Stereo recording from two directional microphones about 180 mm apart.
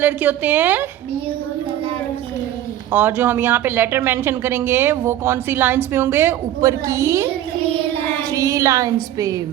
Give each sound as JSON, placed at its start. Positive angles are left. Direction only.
{"t": 0.0, "sound": "speech", "side_deg": -10}
{"t": 2.9, "sound": "speech", "side_deg": -10}
{"t": 8.3, "sound": "a woman's voice", "side_deg": -20}